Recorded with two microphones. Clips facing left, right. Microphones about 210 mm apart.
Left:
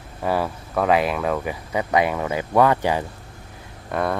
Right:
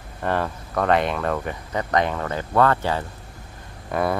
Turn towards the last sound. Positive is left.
turn(degrees=-5)  # may be behind; listen again after turning